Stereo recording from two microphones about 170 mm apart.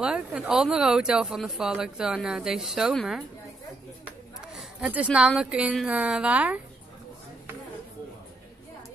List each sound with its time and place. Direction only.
0.0 s speech: 5° right (ahead or behind)
4.6 s a sound: 5° right (ahead or behind)
5.1 s speech: 5° right (ahead or behind)